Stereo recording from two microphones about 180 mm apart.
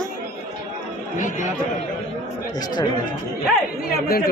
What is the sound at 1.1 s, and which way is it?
Speech, 45° left (ahead or behind).